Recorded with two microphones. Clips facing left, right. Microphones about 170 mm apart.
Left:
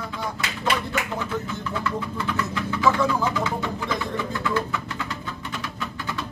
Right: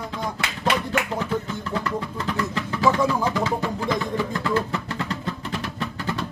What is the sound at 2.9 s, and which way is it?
Music, 15° right (ahead or behind).